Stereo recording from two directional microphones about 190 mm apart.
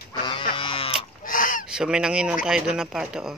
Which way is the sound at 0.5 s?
30° left (ahead or behind).